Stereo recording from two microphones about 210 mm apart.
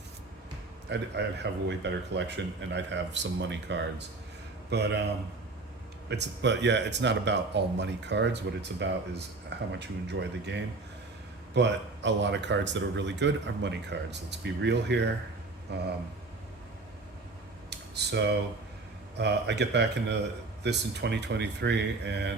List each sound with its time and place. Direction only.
0.9 s a man's voice: 55° right (ahead or behind)
6.1 s a man's voice: 55° right (ahead or behind)
17.7 s a sound: 55° right (ahead or behind)
19.1 s a man's voice: 55° right (ahead or behind)